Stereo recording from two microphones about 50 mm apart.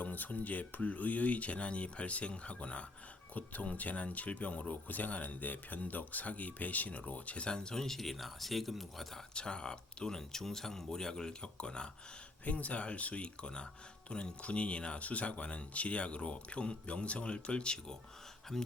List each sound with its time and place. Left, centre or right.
0.0 s speech: left
7.4 s speech: centre
9.3 s speech: centre
12.5 s speech: left
18.5 s speech: centre